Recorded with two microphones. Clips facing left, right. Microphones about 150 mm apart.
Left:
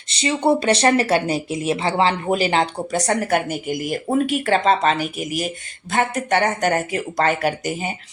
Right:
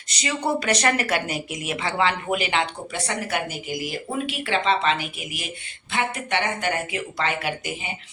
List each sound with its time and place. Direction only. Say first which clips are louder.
0.1 s speech: left 7 dB; 25° left (ahead or behind); by 7.9 s 45° left (ahead or behind)